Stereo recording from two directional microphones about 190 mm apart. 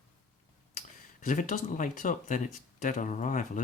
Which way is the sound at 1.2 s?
45° left (ahead or behind).